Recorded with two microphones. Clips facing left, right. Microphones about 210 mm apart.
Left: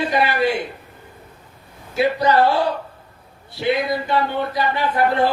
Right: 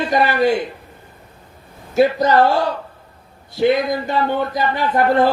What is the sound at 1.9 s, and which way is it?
Speech, 45° right (ahead or behind).